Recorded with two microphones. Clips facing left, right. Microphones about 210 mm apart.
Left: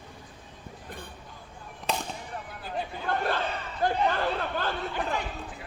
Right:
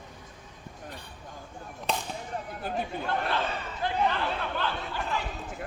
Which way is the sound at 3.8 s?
45° left (ahead or behind).